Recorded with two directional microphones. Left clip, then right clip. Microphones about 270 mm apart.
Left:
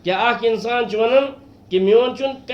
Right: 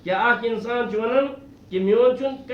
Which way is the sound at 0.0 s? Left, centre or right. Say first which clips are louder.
Left 3 dB; left.